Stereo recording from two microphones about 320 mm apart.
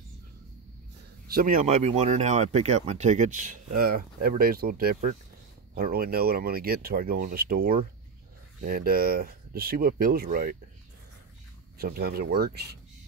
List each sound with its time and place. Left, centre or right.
1.2 s speech: right
11.8 s speech: right